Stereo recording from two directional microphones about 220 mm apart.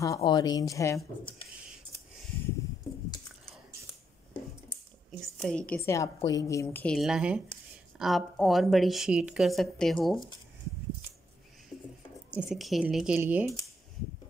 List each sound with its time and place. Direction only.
0.0 s speech: 15° left (ahead or behind)
5.2 s a woman's voice: 5° left (ahead or behind)
12.3 s a woman's voice: 5° right (ahead or behind)